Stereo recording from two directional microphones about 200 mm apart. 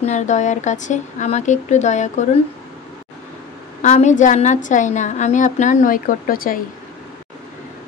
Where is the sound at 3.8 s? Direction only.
35° left (ahead or behind).